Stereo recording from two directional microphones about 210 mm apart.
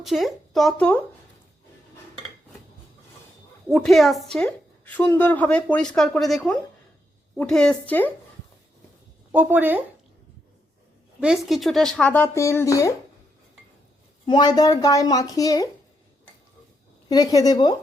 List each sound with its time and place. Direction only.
0.0 s a woman's voice: centre (ahead or behind)
3.7 s a woman's voice: centre (ahead or behind)
9.3 s speech: 5° right (ahead or behind)
11.2 s speech: centre (ahead or behind); by 12.9 s 15° left (ahead or behind)
14.3 s speech: 20° left (ahead or behind)
17.1 s speech: 20° left (ahead or behind)